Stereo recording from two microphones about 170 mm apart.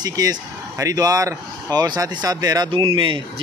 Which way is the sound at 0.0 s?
20° right (ahead or behind).